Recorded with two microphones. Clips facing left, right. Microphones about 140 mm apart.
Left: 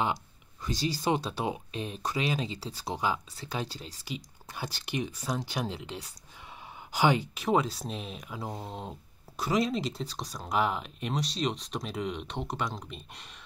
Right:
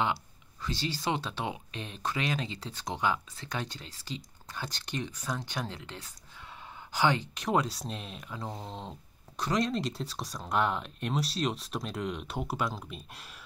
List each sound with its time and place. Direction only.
1.0 s speech: 40° left (ahead or behind)
1.8 s speech: 10° left (ahead or behind)
2.9 s speech: 30° left (ahead or behind)
4.0 s speech: 10° left (ahead or behind)